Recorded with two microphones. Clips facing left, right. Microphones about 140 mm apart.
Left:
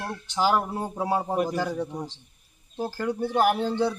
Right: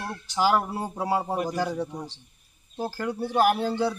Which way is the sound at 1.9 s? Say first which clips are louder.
Left 2 dB; 15° left (ahead or behind).